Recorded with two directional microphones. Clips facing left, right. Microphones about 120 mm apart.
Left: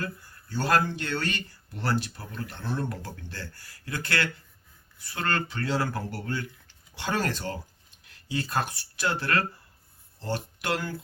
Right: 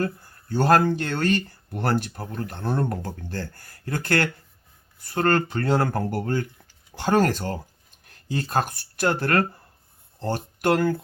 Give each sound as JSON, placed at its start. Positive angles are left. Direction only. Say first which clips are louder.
{"t": 0.0, "sound": "speech", "louder": "right 8 dB", "side_deg": -50}